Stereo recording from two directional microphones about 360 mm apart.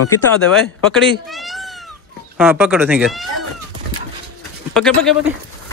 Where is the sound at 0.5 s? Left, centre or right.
Centre.